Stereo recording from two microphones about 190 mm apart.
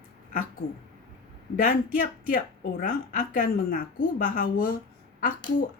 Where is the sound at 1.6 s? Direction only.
45° left (ahead or behind).